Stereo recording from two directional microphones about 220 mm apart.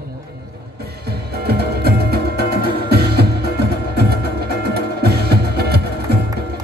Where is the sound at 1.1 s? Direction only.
45° right (ahead or behind).